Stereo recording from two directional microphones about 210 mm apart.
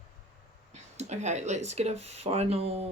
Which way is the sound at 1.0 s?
35° right (ahead or behind).